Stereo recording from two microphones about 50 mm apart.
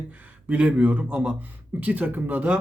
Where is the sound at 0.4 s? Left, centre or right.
Right.